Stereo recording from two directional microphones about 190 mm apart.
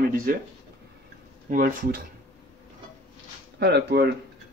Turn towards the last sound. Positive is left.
turn(degrees=-60)  # may be behind; listen again after turning